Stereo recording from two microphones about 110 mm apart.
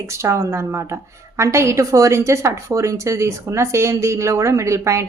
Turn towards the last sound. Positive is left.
turn(degrees=-25)  # may be behind; listen again after turning